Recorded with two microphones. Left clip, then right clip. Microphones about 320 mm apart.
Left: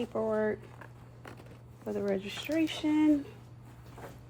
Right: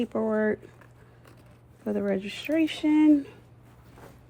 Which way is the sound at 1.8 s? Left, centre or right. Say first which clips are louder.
Right 4 dB; right.